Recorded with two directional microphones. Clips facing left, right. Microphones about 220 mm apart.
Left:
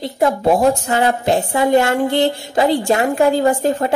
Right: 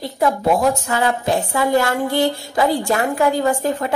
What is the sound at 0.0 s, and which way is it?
A woman's voice, 30° left (ahead or behind).